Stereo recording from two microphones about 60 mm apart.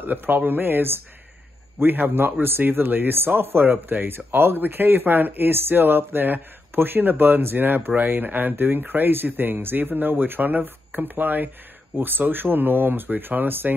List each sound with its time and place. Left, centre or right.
0.0 s a man's voice: right